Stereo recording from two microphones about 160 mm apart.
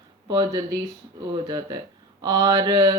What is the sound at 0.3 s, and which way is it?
Speech, 25° right (ahead or behind).